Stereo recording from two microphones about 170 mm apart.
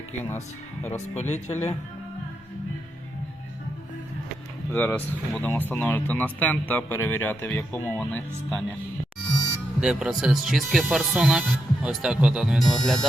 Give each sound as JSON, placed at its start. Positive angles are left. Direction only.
{"t": 0.3, "sound": "speech", "side_deg": 10}
{"t": 1.1, "sound": "speech", "side_deg": 40}
{"t": 4.7, "sound": "speech", "side_deg": 10}
{"t": 9.8, "sound": "speech", "side_deg": -5}